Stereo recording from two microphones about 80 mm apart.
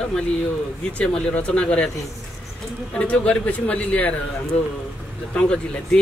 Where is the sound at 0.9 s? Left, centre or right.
Centre.